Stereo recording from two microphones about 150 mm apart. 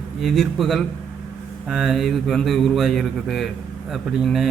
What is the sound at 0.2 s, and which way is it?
A man's voice, centre (ahead or behind).